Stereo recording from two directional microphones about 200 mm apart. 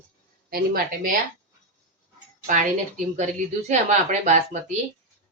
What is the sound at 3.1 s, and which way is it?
Speech, 35° right (ahead or behind).